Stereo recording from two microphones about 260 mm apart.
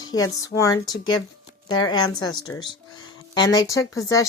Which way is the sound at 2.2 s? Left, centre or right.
Centre.